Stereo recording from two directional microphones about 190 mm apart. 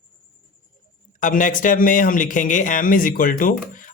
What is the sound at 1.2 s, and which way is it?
A man's voice, 45° left (ahead or behind).